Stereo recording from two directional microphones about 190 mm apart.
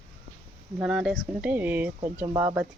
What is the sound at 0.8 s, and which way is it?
Speech, 5° right (ahead or behind).